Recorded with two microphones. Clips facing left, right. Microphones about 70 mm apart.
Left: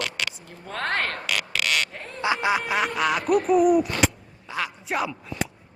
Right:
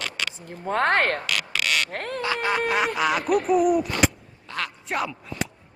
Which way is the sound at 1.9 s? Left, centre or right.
Right.